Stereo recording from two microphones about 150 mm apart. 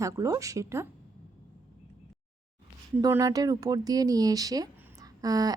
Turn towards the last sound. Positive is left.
turn(degrees=-25)  # may be behind; listen again after turning